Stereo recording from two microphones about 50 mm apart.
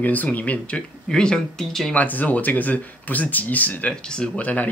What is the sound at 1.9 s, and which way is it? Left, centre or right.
Speech, left.